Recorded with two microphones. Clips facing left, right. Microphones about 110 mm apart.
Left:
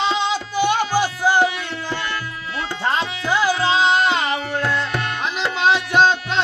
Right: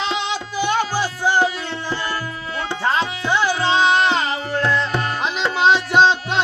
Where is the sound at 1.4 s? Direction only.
35° right (ahead or behind).